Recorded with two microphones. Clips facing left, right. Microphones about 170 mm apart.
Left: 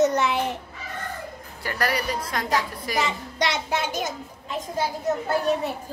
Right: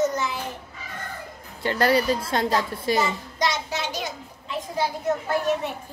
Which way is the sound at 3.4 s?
60° left (ahead or behind).